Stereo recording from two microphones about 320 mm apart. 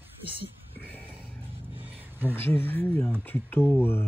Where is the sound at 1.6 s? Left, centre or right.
Centre.